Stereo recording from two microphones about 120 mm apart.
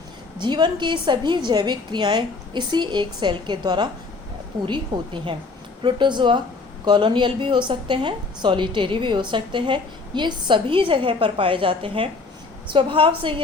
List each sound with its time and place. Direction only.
0.3 s a woman's voice: 40° right (ahead or behind)